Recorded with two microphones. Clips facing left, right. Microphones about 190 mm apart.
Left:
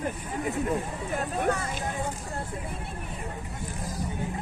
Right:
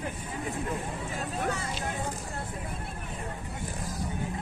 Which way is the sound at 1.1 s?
55° left (ahead or behind).